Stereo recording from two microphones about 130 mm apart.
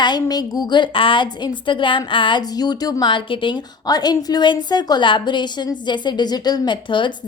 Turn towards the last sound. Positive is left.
turn(degrees=40)  # may be behind; listen again after turning